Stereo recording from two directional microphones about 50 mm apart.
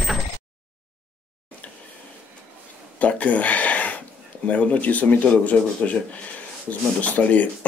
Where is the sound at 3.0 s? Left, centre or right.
Left.